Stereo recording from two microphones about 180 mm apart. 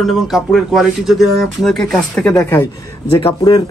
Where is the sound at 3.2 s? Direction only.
30° left (ahead or behind).